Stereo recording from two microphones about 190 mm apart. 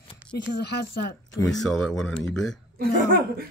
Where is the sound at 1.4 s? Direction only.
Centre (ahead or behind).